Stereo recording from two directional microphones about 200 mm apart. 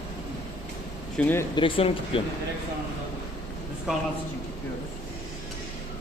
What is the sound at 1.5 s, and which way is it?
Speech, 25° left (ahead or behind).